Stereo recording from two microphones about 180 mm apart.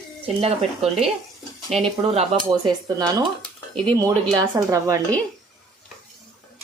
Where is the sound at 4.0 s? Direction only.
20° right (ahead or behind).